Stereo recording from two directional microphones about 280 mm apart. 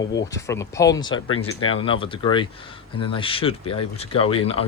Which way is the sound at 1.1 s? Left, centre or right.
Left.